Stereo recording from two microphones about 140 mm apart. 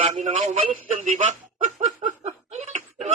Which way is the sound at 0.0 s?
60° right (ahead or behind).